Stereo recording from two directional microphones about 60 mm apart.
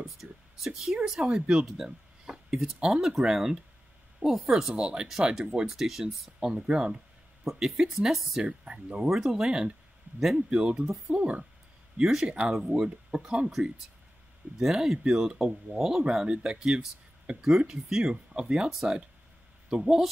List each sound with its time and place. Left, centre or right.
0.0 s a sound: centre
1.0 s speech: centre
6.5 s speech: centre
8.5 s speech: centre
9.1 s speech: centre
14.6 s speech: centre